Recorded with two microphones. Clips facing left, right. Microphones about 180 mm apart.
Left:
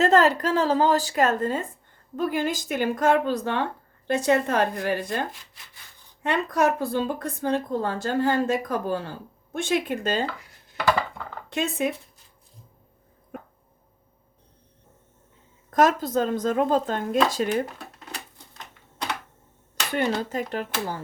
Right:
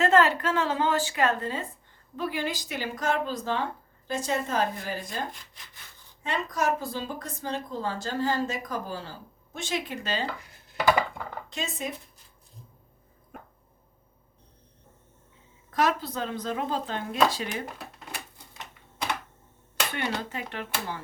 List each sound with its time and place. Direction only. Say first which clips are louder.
0.0 s a woman's voice: left 3 dB; 40° left (ahead or behind); by 5.2 s 65° left (ahead or behind)
6.2 s a woman's voice: left 5 dB; 60° left (ahead or behind)
11.4 s a woman's voice: left 10 dB; 60° left (ahead or behind)
15.7 s speech: left 6 dB; 45° left (ahead or behind)
18.3 s typewriter: even; 10° right (ahead or behind)
19.9 s a woman's voice: left 9 dB; 40° left (ahead or behind)